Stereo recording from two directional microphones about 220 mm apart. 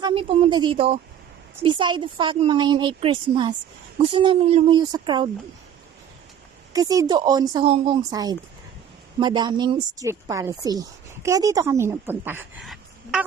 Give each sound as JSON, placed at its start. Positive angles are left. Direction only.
{"t": 0.0, "sound": "speech", "side_deg": -25}
{"t": 6.7, "sound": "a woman's voice", "side_deg": -15}